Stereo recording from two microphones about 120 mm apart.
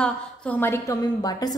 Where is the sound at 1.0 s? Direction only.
35° left (ahead or behind).